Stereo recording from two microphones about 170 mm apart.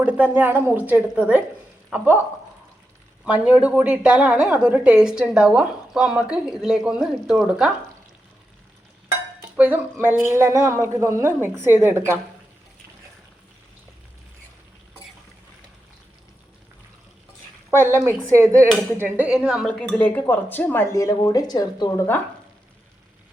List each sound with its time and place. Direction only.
0.0 s a woman's voice: 10° right (ahead or behind)
3.2 s a woman's voice: 5° right (ahead or behind)
9.6 s a woman's voice: 10° right (ahead or behind)
17.7 s a woman's voice: 15° right (ahead or behind); by 22.0 s 20° left (ahead or behind)